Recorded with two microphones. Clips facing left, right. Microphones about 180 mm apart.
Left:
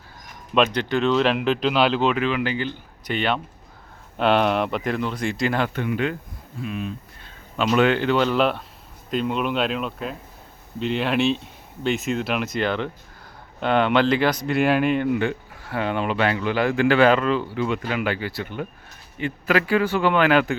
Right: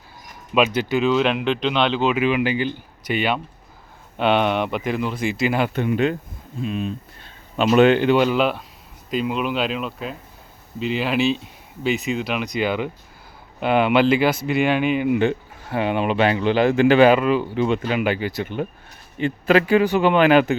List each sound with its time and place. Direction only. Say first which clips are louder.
0.5 s speech: right 1 dB; 5° right (ahead or behind)
5.7 s speech: right 4 dB; 25° right (ahead or behind)
8.3 s speech: right 1 dB; centre (ahead or behind)
15.1 s speech: right 4 dB; 20° right (ahead or behind)